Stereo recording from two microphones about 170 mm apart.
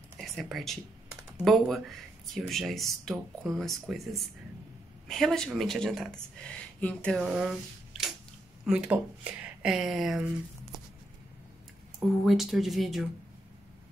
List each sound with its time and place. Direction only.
0.2 s speech: centre (ahead or behind)
8.6 s speech: 5° right (ahead or behind)
12.3 s speech: centre (ahead or behind)